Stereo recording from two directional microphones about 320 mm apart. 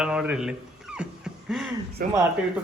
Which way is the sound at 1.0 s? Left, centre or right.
Centre.